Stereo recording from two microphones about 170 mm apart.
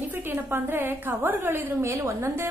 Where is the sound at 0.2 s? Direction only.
15° right (ahead or behind).